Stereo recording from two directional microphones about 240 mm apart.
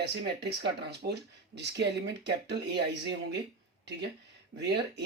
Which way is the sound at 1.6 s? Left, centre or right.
Right.